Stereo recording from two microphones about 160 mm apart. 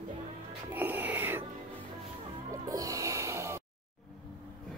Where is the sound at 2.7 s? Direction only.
20° right (ahead or behind).